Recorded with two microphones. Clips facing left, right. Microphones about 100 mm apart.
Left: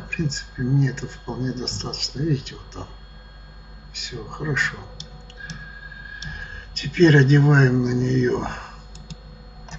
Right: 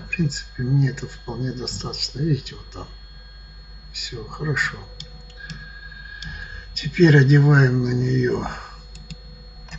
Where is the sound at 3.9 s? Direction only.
5° right (ahead or behind).